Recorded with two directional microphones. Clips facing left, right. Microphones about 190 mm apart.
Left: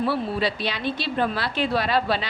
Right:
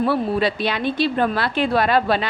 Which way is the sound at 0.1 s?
55° right (ahead or behind).